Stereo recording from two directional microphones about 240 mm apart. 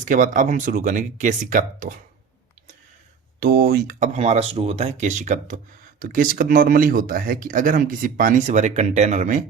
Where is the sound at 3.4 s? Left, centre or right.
Right.